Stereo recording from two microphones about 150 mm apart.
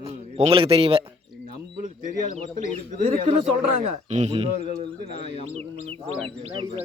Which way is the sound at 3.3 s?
45° right (ahead or behind).